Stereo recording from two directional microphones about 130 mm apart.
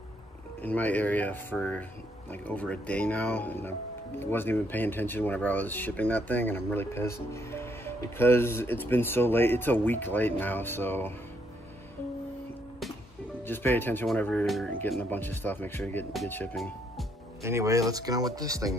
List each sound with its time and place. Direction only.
0.6 s speech: 10° left (ahead or behind)
13.5 s speech: 15° left (ahead or behind)
16.1 s speech: centre (ahead or behind)
17.4 s speech: 20° right (ahead or behind)